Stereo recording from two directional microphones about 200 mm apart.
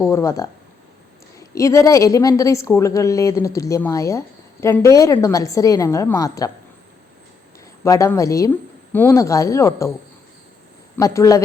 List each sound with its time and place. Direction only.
0.0 s a woman's voice: 15° left (ahead or behind)
7.9 s a woman's voice: 15° left (ahead or behind)
10.9 s a woman's voice: 15° left (ahead or behind)